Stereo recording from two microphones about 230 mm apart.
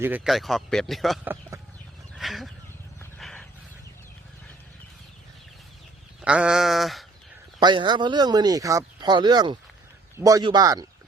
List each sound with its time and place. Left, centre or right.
0.0 s speech: centre
2.1 s chicken: centre
3.2 s horse: centre
6.2 s speech: centre
7.6 s a man's voice: centre